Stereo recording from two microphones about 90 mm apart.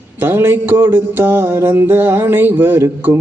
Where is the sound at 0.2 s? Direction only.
25° right (ahead or behind).